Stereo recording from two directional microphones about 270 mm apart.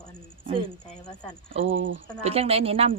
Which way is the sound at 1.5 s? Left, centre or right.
Right.